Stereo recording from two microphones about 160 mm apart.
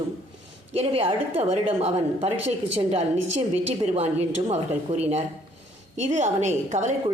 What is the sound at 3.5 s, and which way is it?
A woman's voice, 45° right (ahead or behind).